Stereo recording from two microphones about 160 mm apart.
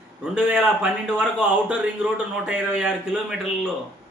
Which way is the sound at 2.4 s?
5° right (ahead or behind).